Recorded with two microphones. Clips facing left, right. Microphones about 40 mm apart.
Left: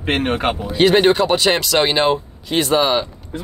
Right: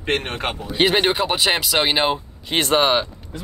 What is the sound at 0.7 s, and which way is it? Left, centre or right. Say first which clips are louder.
Speech: left 5 dB; centre.